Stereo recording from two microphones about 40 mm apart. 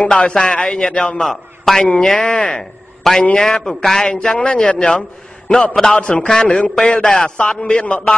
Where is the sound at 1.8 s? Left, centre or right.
Left.